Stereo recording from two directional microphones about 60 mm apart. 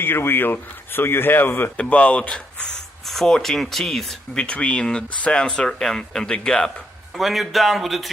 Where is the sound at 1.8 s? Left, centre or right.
Left.